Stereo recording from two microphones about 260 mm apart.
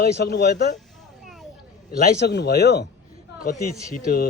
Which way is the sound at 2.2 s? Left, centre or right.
Left.